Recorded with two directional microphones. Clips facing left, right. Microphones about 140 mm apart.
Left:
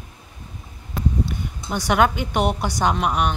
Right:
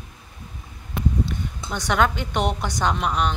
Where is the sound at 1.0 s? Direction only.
10° left (ahead or behind).